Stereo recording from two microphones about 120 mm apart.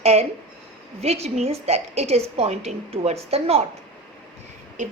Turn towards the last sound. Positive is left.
turn(degrees=-90)